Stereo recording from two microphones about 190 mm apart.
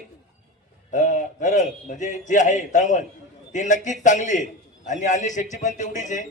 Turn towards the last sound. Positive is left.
turn(degrees=40)  # may be behind; listen again after turning